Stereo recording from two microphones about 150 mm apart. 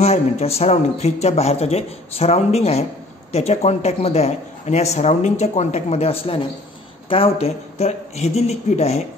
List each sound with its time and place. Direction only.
0.0 s speech: 45° left (ahead or behind)